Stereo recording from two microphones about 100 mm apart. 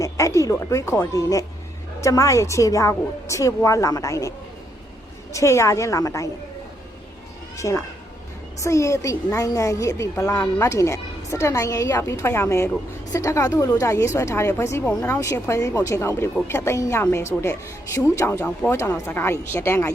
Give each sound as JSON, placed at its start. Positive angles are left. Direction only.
{"t": 0.0, "sound": "a woman's voice", "side_deg": 30}
{"t": 7.5, "sound": "a woman's voice", "side_deg": 30}